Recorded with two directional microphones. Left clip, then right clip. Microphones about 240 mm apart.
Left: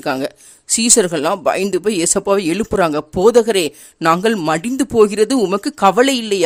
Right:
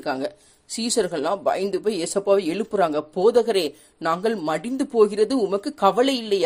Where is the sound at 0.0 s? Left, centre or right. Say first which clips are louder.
Left 6 dB; left.